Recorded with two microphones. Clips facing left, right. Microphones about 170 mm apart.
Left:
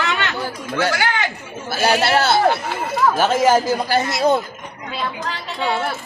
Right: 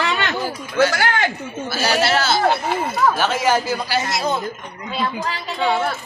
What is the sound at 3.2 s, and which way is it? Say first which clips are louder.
A man's voice: left 3 dB; 45° left (ahead or behind).